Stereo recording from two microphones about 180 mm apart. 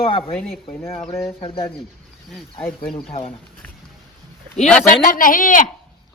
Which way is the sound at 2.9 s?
30° left (ahead or behind).